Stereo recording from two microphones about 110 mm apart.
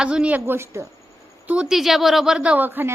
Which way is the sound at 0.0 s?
10° right (ahead or behind).